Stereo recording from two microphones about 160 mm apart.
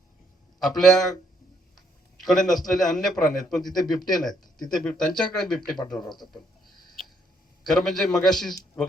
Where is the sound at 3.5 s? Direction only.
Centre (ahead or behind).